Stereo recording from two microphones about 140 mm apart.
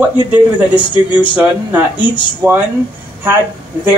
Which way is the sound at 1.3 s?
10° right (ahead or behind).